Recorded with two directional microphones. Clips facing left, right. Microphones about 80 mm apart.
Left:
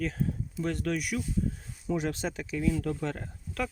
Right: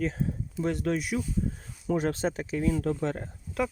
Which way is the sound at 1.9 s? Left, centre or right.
Right.